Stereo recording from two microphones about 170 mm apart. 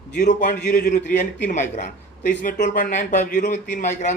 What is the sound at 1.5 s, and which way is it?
A man's voice, 45° left (ahead or behind).